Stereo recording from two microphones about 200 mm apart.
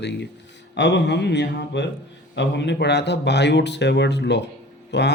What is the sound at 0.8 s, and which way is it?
Speech, 60° left (ahead or behind).